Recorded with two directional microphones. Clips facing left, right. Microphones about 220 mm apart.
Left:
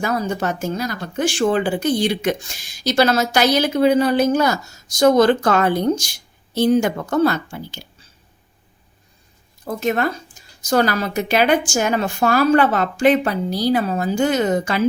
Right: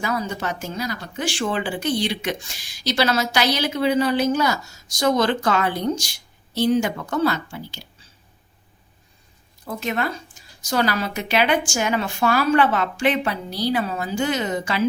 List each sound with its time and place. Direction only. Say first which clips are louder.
0.0 s speech: left 4 dB; 45° left (ahead or behind)
9.6 s speech: left 5 dB; 45° left (ahead or behind)